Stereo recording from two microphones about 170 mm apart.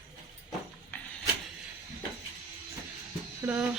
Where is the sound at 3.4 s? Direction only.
15° right (ahead or behind).